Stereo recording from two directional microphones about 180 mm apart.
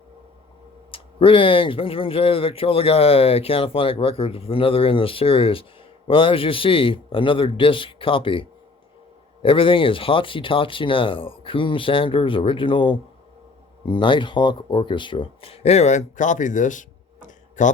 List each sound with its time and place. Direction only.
0.9 s speech: 30° left (ahead or behind); by 17.7 s 45° left (ahead or behind)